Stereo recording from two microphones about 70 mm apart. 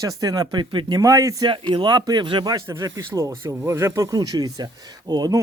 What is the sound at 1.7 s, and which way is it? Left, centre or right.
Speech, right.